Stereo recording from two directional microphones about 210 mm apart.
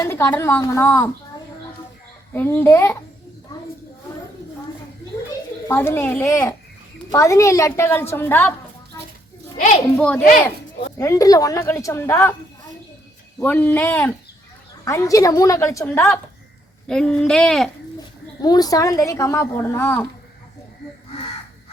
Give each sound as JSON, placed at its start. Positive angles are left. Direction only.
{"t": 0.0, "sound": "a child's voice", "side_deg": 10}
{"t": 2.3, "sound": "a child's voice", "side_deg": 10}
{"t": 5.6, "sound": "a child's voice", "side_deg": 10}
{"t": 8.9, "sound": "a sound", "side_deg": 15}
{"t": 10.9, "sound": "a child's voice", "side_deg": 15}
{"t": 13.4, "sound": "a child's voice", "side_deg": 10}
{"t": 18.4, "sound": "a child's voice", "side_deg": 20}